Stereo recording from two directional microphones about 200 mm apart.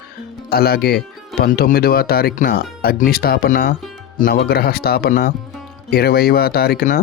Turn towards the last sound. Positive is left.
turn(degrees=45)  # may be behind; listen again after turning